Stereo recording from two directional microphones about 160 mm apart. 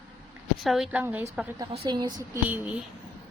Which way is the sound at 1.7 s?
35° right (ahead or behind).